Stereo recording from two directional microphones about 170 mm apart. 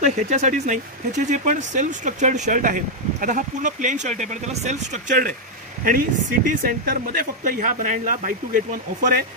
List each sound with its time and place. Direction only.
0.0 s speech: 45° right (ahead or behind)